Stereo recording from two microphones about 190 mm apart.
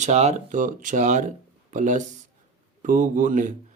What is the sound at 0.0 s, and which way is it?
Speech, 35° right (ahead or behind).